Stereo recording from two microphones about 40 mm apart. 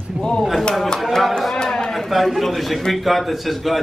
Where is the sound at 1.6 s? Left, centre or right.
Centre.